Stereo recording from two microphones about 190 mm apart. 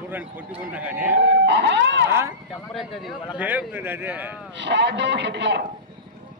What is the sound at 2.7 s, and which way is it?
A man's voice, centre (ahead or behind).